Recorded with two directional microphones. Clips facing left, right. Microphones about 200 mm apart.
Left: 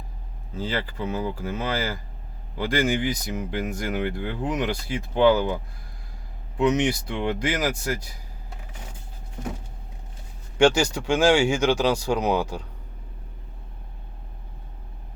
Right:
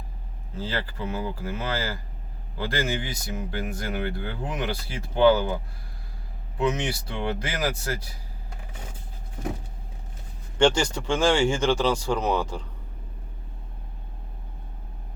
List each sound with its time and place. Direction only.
1.1 s speech: 20° left (ahead or behind)
6.6 s speech: 15° left (ahead or behind)
10.6 s speech: 10° left (ahead or behind)